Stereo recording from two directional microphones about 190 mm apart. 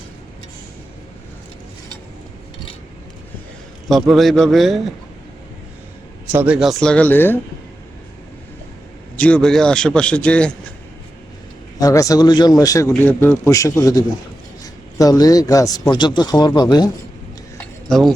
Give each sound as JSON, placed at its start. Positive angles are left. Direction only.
{"t": 4.1, "sound": "a man's voice", "side_deg": 0}
{"t": 6.3, "sound": "a man's voice", "side_deg": -5}
{"t": 9.1, "sound": "a man's voice", "side_deg": 5}
{"t": 11.8, "sound": "a man's voice", "side_deg": 20}
{"t": 17.6, "sound": "a sound", "side_deg": 5}